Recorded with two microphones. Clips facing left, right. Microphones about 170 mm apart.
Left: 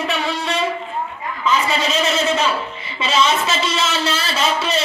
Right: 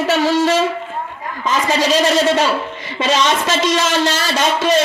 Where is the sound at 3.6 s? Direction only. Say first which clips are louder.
Right 5 dB; 90° right.